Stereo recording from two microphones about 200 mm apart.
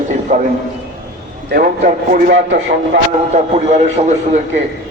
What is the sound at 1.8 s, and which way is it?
Speech, 45° right (ahead or behind).